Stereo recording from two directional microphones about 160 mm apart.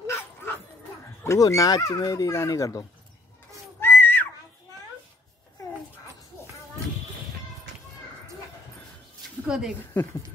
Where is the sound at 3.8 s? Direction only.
15° left (ahead or behind).